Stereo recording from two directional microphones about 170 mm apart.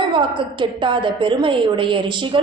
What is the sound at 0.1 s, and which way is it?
A woman's voice, 30° right (ahead or behind).